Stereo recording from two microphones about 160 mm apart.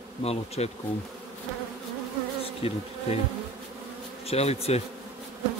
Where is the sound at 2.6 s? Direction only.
40° left (ahead or behind).